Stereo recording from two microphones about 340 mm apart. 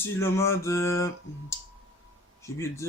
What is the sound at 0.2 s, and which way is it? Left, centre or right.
Speech, centre.